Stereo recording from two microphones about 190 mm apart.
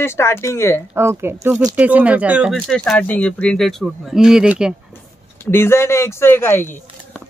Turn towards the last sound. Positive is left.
turn(degrees=10)  # may be behind; listen again after turning